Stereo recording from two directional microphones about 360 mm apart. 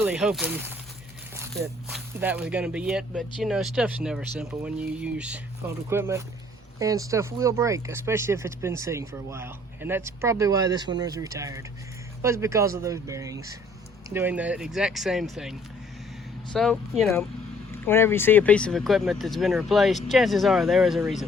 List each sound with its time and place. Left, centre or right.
0.0 s speech: centre